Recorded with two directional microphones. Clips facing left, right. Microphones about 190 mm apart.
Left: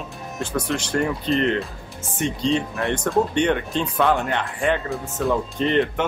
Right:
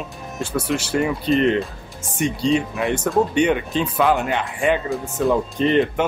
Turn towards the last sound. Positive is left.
turn(degrees=-15)  # may be behind; listen again after turning